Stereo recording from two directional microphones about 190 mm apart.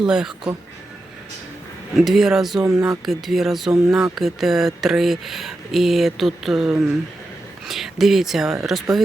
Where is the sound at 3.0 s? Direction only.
Centre (ahead or behind).